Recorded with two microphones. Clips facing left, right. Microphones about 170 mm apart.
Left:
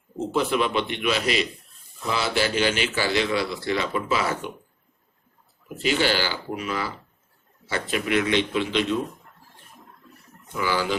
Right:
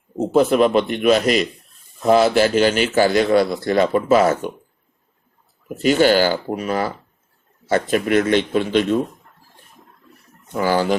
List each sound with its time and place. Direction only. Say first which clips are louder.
0.2 s a man's voice: right 9 dB; 45° right (ahead or behind)
5.6 s a man's voice: right 8 dB; 45° right (ahead or behind)
10.5 s a man's voice: right 7 dB; 45° right (ahead or behind)